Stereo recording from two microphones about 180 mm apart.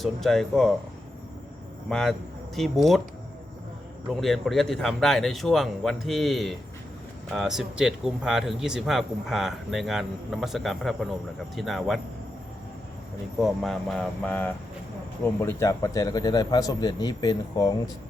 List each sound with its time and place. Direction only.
0.0 s speech: centre (ahead or behind)
1.9 s speech: 5° left (ahead or behind)
4.1 s speech: centre (ahead or behind)
13.4 s speech: centre (ahead or behind); by 17.7 s 20° left (ahead or behind)